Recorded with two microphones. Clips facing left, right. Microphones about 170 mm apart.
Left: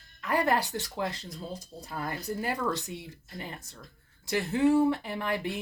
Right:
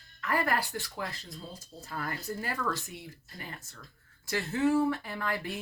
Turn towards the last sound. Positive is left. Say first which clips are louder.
# left 3 dB
turn(degrees=20)  # may be behind; listen again after turning